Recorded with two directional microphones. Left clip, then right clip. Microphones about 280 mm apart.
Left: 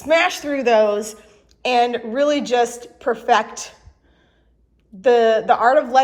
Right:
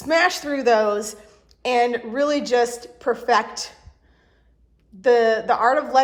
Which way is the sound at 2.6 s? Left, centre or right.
Right.